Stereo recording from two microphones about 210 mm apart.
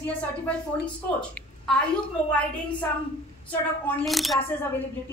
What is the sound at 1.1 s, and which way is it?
A woman's voice, 5° left (ahead or behind).